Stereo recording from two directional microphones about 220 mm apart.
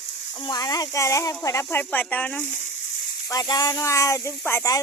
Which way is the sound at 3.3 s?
15° left (ahead or behind).